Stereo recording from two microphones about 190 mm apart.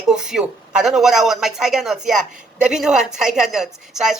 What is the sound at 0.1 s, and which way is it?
A woman's voice, 5° right (ahead or behind).